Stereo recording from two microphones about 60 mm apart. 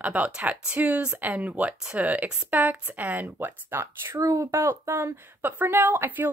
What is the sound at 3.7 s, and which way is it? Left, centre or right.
A woman's voice, right.